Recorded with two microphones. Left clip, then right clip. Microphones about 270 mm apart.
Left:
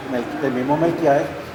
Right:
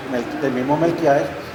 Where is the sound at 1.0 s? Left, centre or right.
Centre.